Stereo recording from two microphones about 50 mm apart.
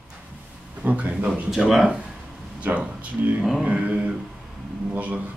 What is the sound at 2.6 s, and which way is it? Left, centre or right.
Speech, right.